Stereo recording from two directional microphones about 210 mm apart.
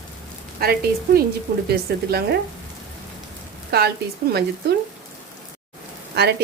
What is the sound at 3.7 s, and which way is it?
Speech, 50° right (ahead or behind).